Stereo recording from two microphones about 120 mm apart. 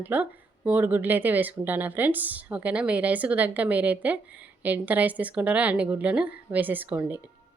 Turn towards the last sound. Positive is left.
turn(degrees=-15)  # may be behind; listen again after turning